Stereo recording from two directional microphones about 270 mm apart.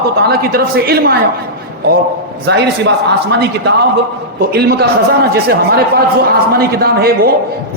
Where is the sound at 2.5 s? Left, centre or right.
Right.